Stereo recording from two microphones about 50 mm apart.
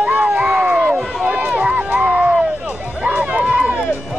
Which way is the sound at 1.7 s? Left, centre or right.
Right.